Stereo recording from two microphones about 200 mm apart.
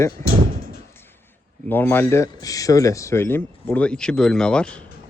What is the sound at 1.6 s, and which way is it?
Speech, 10° left (ahead or behind).